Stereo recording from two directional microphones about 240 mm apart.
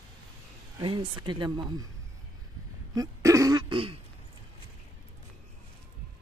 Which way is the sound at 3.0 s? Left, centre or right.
Centre.